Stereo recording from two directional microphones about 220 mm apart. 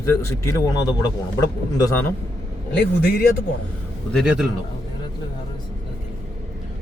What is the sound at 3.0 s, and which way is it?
Speech, 40° left (ahead or behind).